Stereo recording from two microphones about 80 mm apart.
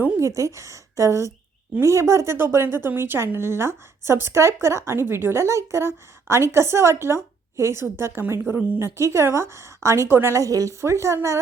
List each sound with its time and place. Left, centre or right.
0.2 s a woman's voice: right
10.4 s a woman's voice: right